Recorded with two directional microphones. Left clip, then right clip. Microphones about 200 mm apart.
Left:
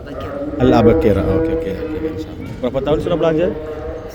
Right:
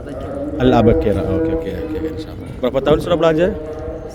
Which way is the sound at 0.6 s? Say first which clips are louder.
Left 1 dB; 10° right (ahead or behind).